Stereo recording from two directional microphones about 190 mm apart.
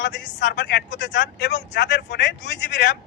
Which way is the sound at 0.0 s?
70° left (ahead or behind).